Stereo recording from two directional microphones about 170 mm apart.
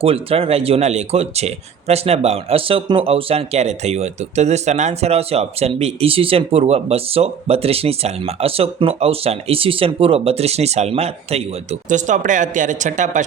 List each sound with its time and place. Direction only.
0.0 s speech: 35° right (ahead or behind)